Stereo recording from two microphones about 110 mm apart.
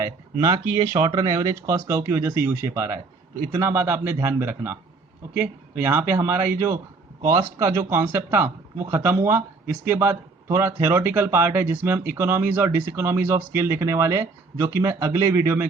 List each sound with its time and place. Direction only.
0.0 s speech: 30° right (ahead or behind)